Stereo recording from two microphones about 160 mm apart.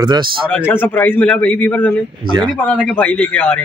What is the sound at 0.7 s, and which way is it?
Speech, 10° left (ahead or behind).